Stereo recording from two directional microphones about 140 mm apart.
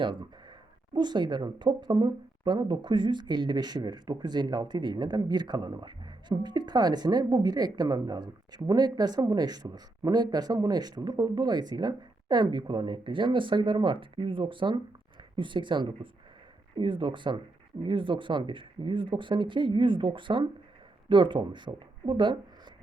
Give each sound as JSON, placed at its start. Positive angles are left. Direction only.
{"t": 0.0, "sound": "speech", "side_deg": -35}